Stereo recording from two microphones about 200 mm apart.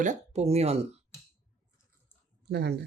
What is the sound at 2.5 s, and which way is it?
Speech, 55° right (ahead or behind).